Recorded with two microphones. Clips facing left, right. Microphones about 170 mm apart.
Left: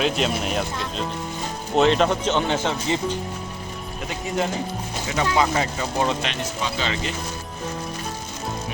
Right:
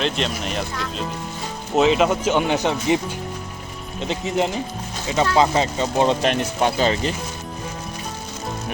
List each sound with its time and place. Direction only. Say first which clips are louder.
0.0 s speech: left 1 dB; 5° left (ahead or behind); by 6.1 s 25° right (ahead or behind)
6.2 s speech: right 8 dB; 50° right (ahead or behind)